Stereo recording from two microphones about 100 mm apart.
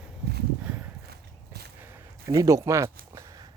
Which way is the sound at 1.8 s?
30° right (ahead or behind).